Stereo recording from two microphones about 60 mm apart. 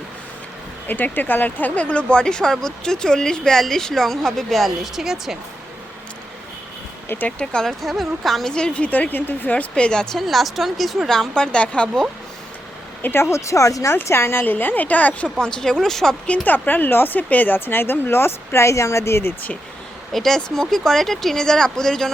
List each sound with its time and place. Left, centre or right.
0.9 s a woman's voice: left; by 5.4 s centre
7.3 s speech: centre
7.7 s a woman's voice: centre
8.5 s speech: centre
10.2 s a woman's voice: centre
13.0 s speech: left
13.3 s speech: left
13.9 s speech: left
14.4 s speech: left
15.4 s speech: centre
16.2 s speech: left
20.1 s speech: centre